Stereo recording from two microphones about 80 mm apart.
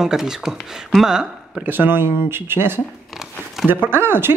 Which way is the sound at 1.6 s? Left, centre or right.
Right.